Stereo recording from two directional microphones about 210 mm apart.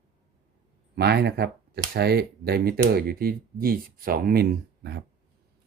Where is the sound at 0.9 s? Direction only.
50° right (ahead or behind).